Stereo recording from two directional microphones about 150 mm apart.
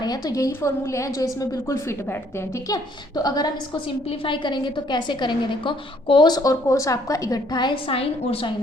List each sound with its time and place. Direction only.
0.0 s a woman's voice: 25° left (ahead or behind)